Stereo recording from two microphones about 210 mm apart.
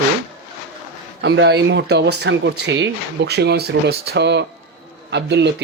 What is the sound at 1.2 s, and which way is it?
Speech, 55° right (ahead or behind).